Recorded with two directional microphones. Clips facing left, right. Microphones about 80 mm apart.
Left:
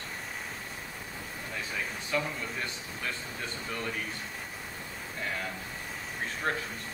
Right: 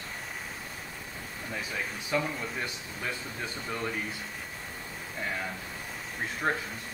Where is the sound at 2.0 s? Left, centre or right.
Centre.